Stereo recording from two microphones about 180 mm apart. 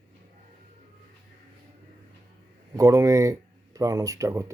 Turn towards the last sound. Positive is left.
turn(degrees=-15)  # may be behind; listen again after turning